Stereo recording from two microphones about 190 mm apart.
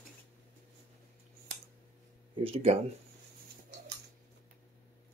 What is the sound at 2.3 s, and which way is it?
Speech, 30° right (ahead or behind).